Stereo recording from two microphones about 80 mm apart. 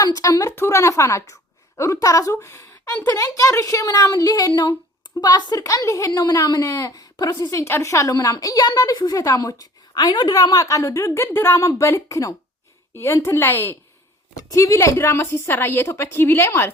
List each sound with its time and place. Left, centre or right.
0.0 s a woman's voice: left
0.5 s a woman's voice: left
3.0 s a woman's voice: left
6.1 s a woman's voice: left
7.7 s a woman's voice: left